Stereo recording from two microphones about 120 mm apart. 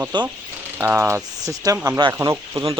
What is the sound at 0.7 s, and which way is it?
Speech, 15° right (ahead or behind).